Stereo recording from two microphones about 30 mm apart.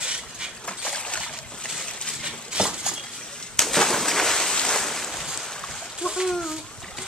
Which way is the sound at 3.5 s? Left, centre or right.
Centre.